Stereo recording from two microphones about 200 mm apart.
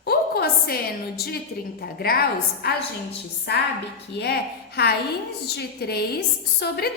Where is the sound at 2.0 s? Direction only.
50° left (ahead or behind).